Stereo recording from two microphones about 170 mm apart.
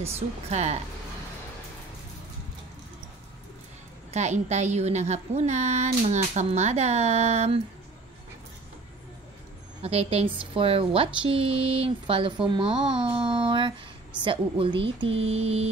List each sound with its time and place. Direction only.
0.5 s a woman's voice: 40° right (ahead or behind)
4.1 s a woman's voice: 40° right (ahead or behind)
9.8 s a woman's voice: 35° right (ahead or behind)
12.9 s a sound: 30° right (ahead or behind)
14.2 s a woman's voice: 30° right (ahead or behind)